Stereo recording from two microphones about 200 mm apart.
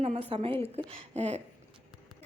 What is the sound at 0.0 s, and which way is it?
Speech, 30° right (ahead or behind).